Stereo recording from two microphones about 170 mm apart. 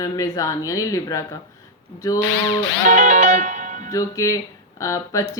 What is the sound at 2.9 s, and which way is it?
Music, 50° right (ahead or behind).